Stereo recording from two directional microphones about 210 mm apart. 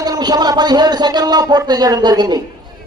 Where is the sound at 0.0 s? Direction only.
20° right (ahead or behind).